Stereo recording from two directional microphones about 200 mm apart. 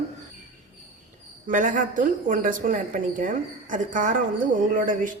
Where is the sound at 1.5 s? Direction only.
40° right (ahead or behind).